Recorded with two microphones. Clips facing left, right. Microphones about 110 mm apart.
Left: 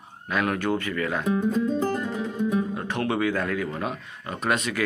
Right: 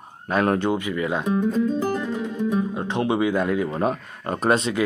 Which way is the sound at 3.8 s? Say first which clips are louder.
Right 7 dB; 40° right (ahead or behind).